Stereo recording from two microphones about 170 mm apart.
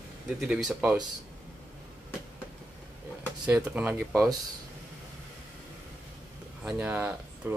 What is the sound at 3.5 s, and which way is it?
Speech, 10° right (ahead or behind).